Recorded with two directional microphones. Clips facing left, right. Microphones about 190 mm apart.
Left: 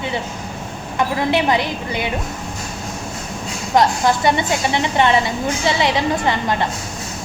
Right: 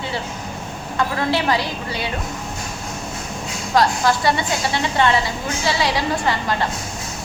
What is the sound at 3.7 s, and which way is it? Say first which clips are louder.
A woman's voice: left 2 dB; 20° left (ahead or behind).